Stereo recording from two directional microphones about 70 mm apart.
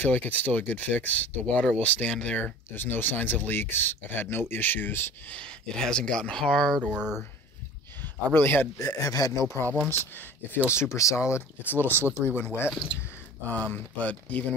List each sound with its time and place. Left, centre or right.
0.0 s speech: left
2.7 s speech: left
5.4 s speech: centre
6.9 s speech: centre
8.0 s speech: left
8.7 s speech: left
9.8 s speech: left
10.7 s speech: left
11.6 s speech: left
13.5 s speech: left